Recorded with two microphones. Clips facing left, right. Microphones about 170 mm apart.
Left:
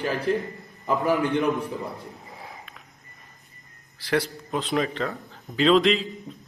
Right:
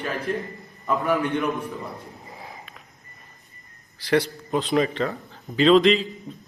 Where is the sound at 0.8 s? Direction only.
35° left (ahead or behind).